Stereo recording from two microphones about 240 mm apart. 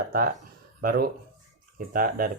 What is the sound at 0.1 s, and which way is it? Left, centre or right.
Speech, right.